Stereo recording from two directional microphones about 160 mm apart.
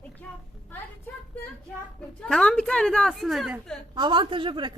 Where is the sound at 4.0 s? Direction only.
30° right (ahead or behind).